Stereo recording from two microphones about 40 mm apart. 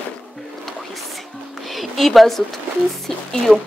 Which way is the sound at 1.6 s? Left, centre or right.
Centre.